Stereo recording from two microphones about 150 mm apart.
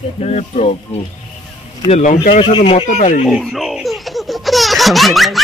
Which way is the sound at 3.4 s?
Centre (ahead or behind).